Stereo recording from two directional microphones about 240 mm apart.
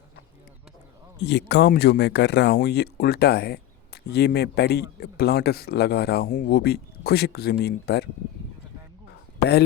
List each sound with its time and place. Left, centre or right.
1.2 s speech: left
9.4 s speech: left